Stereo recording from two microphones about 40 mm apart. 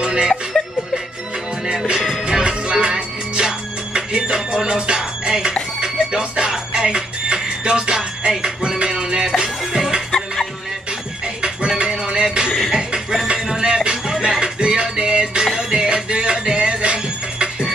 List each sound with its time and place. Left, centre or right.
0.0 s music: centre
1.7 s music: centre
11.4 s music: centre